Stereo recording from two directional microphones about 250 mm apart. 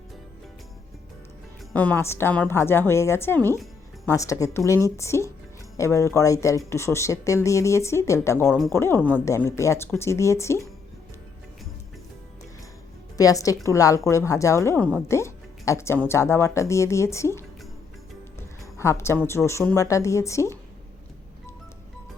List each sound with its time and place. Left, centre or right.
1.7 s speech: centre
13.1 s a woman's voice: centre